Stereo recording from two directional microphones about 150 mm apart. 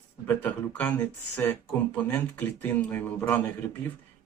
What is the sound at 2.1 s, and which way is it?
Speech, 15° left (ahead or behind).